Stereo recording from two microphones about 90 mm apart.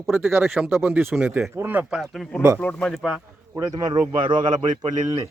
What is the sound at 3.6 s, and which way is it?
Speech, 45° right (ahead or behind).